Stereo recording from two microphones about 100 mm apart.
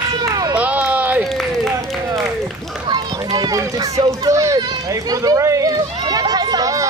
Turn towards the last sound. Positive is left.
turn(degrees=-35)  # may be behind; listen again after turning